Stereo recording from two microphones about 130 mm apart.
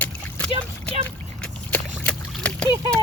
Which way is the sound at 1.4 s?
10° left (ahead or behind).